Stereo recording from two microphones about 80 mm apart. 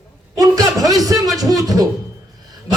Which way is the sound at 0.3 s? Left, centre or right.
Right.